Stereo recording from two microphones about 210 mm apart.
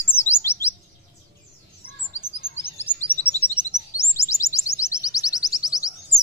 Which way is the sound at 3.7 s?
15° left (ahead or behind).